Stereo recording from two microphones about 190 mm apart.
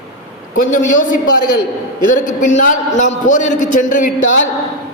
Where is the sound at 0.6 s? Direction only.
45° left (ahead or behind).